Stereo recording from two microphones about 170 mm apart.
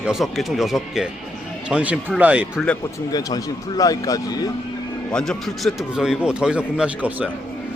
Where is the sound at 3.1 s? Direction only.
20° left (ahead or behind).